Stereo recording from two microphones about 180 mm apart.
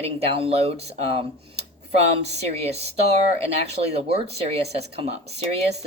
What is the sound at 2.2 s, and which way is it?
Speech, 35° right (ahead or behind).